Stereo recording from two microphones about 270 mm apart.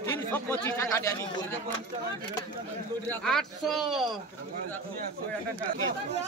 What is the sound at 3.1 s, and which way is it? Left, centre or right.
Speech, centre.